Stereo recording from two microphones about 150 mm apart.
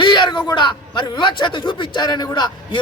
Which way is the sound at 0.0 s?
30° left (ahead or behind).